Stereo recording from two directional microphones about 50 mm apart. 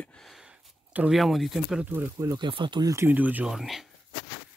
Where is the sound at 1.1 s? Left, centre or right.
Centre.